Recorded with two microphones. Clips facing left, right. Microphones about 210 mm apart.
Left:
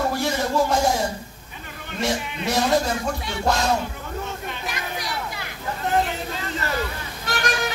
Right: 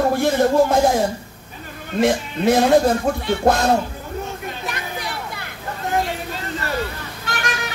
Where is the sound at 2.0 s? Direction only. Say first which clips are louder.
Right 7 dB; 55° right (ahead or behind).